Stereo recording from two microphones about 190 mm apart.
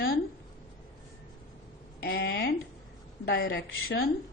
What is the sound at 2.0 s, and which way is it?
A woman's voice, 60° left (ahead or behind).